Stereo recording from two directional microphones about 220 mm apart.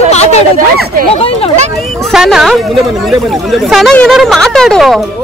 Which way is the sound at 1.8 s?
Centre (ahead or behind).